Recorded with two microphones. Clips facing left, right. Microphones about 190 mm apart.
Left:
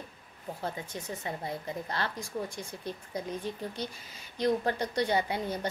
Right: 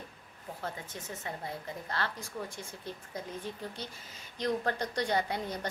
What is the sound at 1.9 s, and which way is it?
Speech, 15° left (ahead or behind).